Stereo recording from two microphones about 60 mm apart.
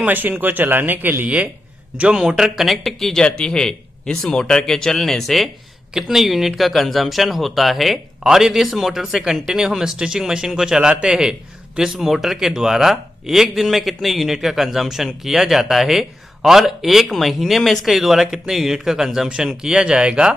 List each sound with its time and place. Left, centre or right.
0.0 s speech: right
2.1 s speech: centre